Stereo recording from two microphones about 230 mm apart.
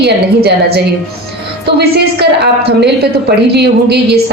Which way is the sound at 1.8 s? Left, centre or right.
Right.